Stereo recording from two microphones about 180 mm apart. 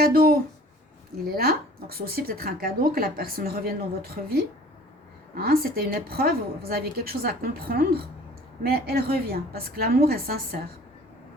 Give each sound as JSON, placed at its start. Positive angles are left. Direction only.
{"t": 0.0, "sound": "speech", "side_deg": -55}